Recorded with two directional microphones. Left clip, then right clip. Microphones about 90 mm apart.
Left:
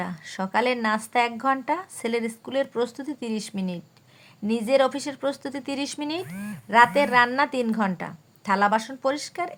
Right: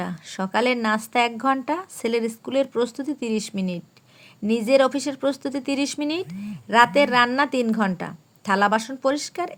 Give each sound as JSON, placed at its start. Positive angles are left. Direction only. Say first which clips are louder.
{"t": 0.0, "sound": "a woman's voice", "louder": "right 1 dB", "side_deg": -30}